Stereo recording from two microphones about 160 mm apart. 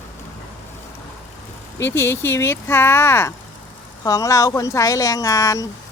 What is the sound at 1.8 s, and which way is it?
Speech, 15° left (ahead or behind).